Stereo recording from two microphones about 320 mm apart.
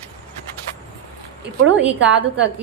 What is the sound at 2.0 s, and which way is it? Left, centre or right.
Speech, right.